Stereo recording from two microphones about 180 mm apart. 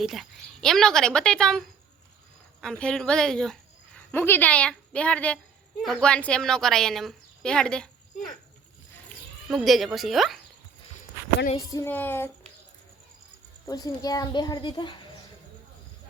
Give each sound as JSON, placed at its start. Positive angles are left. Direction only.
{"t": 0.0, "sound": "a woman's voice", "side_deg": 0}
{"t": 9.5, "sound": "a woman's voice", "side_deg": 0}
{"t": 11.7, "sound": "speech", "side_deg": 15}
{"t": 13.7, "sound": "a woman's voice", "side_deg": 20}